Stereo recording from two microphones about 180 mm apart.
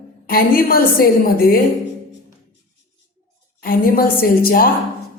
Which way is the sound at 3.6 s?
55° left (ahead or behind).